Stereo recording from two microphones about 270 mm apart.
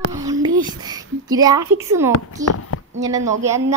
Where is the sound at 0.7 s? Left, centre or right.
Centre.